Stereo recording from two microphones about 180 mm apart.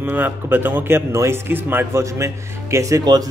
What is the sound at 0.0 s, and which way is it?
Speech, 10° right (ahead or behind).